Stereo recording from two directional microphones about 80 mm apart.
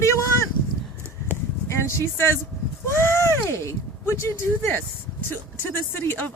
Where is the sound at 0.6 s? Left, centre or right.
Left.